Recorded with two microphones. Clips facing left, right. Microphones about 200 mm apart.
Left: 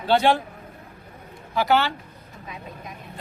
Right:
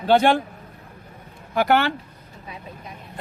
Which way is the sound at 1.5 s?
55° right (ahead or behind).